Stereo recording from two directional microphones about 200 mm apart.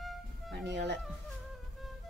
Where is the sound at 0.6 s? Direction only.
60° right (ahead or behind).